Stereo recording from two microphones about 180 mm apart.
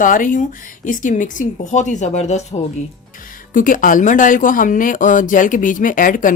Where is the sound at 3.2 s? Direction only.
50° left (ahead or behind).